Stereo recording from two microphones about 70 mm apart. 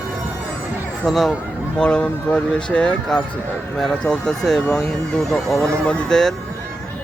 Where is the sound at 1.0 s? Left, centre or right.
Centre.